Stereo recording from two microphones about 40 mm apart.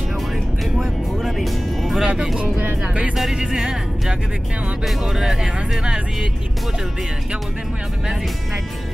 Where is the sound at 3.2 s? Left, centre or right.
Centre.